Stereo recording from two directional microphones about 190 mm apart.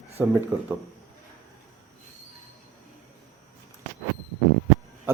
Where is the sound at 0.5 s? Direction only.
10° right (ahead or behind).